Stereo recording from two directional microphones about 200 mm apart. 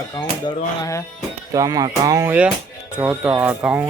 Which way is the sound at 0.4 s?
15° left (ahead or behind).